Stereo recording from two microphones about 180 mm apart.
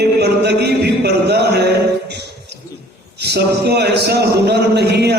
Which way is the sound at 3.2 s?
65° right (ahead or behind).